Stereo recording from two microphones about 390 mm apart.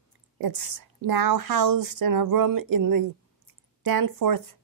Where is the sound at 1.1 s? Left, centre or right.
Right.